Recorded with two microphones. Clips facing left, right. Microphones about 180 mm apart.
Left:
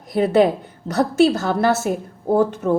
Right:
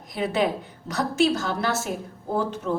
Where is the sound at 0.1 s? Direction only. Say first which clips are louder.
Left 8 dB; 55° left (ahead or behind).